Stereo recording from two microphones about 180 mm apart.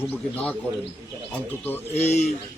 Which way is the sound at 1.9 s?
35° left (ahead or behind).